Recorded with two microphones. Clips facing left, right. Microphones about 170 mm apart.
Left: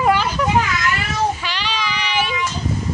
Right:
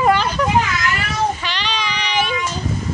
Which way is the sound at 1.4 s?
5° left (ahead or behind).